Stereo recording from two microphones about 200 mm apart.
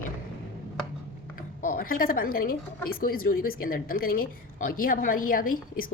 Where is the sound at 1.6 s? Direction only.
45° left (ahead or behind).